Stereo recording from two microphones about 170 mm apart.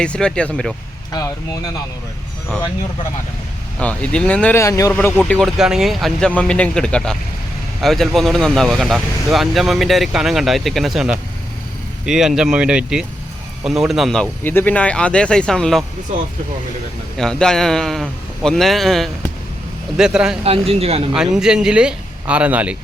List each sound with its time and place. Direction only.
0.0 s speech: 5° left (ahead or behind)
3.8 s speech: 5° left (ahead or behind)
5.3 s speech: centre (ahead or behind)
17.2 s speech: 5° left (ahead or behind)
20.4 s speech: 35° right (ahead or behind)
21.3 s speech: 5° right (ahead or behind)